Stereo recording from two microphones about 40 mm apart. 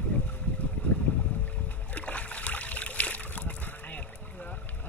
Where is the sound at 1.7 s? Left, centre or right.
Left.